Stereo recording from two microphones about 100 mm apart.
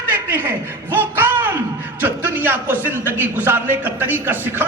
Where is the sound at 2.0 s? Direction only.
20° right (ahead or behind).